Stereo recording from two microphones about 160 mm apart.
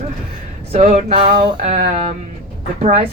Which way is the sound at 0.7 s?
40° right (ahead or behind).